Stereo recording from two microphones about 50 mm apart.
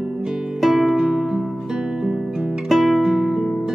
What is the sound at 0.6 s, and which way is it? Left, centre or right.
Music, centre.